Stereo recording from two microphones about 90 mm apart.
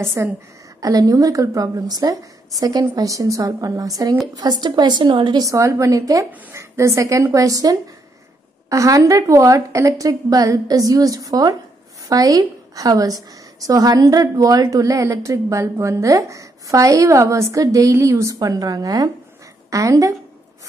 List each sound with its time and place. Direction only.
0.0 s a woman's voice: 30° right (ahead or behind)
0.7 s a woman's voice: 40° right (ahead or behind); by 5.4 s 60° right (ahead or behind)
5.4 s a woman's voice: 35° right (ahead or behind)